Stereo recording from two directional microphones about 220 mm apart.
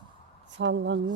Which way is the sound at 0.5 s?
55° right (ahead or behind).